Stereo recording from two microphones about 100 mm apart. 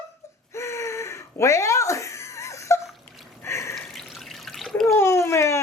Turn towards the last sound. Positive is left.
turn(degrees=30)  # may be behind; listen again after turning